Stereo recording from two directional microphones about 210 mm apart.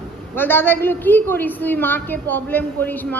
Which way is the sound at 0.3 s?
10° left (ahead or behind).